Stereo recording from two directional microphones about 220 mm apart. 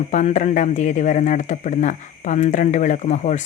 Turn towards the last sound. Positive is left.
turn(degrees=35)  # may be behind; listen again after turning